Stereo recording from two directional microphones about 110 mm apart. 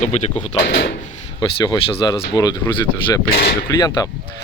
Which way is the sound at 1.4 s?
40° left (ahead or behind).